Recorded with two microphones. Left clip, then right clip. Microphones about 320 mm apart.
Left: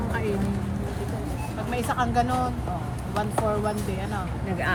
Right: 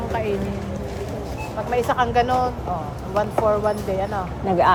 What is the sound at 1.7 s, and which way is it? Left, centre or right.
Speech, centre.